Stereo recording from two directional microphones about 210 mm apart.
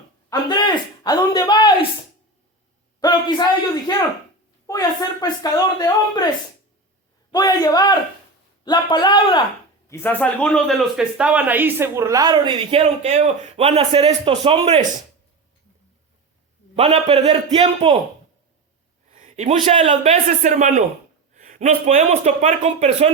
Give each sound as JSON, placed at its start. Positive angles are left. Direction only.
{"t": 0.3, "sound": "speech", "side_deg": 20}
{"t": 3.0, "sound": "a sound", "side_deg": 20}
{"t": 4.6, "sound": "speech", "side_deg": 15}
{"t": 7.3, "sound": "speech", "side_deg": 20}
{"t": 16.7, "sound": "a man's voice", "side_deg": -25}
{"t": 19.1, "sound": "a man's voice", "side_deg": -35}